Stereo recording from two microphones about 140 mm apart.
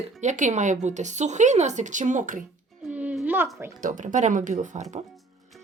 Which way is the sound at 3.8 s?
70° right (ahead or behind).